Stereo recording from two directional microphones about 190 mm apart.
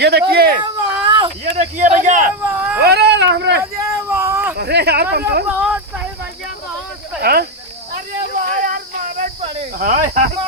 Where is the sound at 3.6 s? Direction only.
15° right (ahead or behind).